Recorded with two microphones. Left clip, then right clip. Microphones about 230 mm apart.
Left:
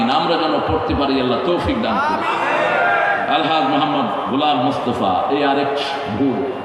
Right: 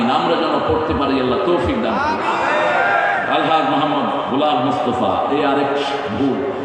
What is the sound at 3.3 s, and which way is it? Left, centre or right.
Speech, left.